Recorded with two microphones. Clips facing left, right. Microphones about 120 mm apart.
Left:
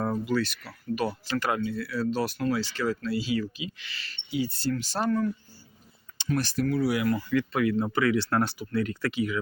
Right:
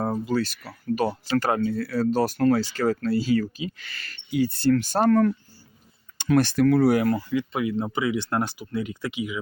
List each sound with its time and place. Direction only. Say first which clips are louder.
0.0 s speech: right 2 dB; 35° right (ahead or behind); by 6.8 s 70° right (ahead or behind)
6.8 s speech: right 5 dB; 45° right (ahead or behind)
7.3 s speech: even; 20° right (ahead or behind)